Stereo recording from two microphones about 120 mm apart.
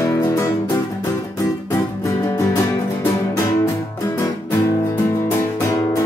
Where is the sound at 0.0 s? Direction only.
25° left (ahead or behind).